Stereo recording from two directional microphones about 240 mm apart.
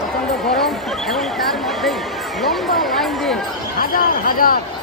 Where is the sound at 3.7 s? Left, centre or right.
Left.